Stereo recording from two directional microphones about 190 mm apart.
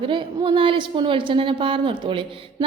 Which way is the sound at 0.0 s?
25° right (ahead or behind).